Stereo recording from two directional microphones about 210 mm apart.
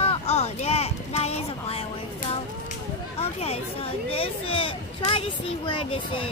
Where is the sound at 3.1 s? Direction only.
30° left (ahead or behind).